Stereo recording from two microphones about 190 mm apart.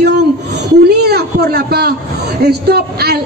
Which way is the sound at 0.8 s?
55° right (ahead or behind).